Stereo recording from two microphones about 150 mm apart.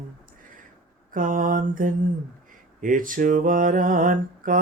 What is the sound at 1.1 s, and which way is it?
Mantra, 65° right (ahead or behind).